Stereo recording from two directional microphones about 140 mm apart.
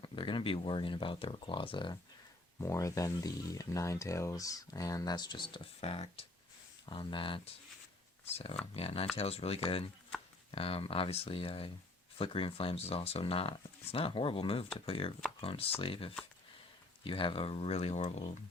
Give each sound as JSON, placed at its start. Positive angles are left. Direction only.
{"t": 0.0, "sound": "speech", "side_deg": 35}
{"t": 2.6, "sound": "speech", "side_deg": 20}